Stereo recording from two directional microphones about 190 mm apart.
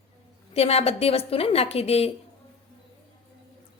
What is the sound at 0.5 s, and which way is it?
A woman's voice, 30° left (ahead or behind).